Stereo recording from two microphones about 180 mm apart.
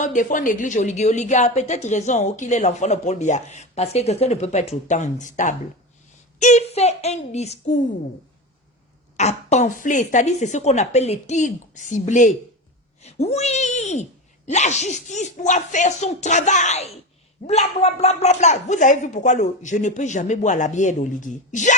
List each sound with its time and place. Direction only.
0.0 s a woman's voice: 45° left (ahead or behind)
9.1 s a woman's voice: 40° left (ahead or behind)